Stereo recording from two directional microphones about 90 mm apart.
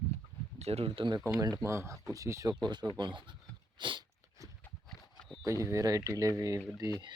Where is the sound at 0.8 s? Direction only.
85° right.